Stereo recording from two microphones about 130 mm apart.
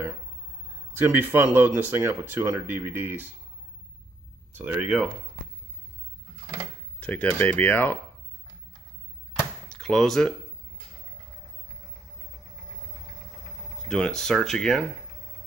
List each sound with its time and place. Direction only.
0.9 s speech: 15° right (ahead or behind)
4.6 s speech: 10° right (ahead or behind)
6.4 s a sound: 15° right (ahead or behind)
7.0 s speech: 10° left (ahead or behind)
9.7 s speech: 5° left (ahead or behind)
13.8 s speech: 5° left (ahead or behind)